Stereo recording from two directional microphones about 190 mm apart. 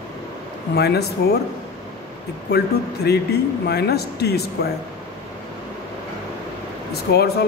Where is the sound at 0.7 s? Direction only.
60° left (ahead or behind).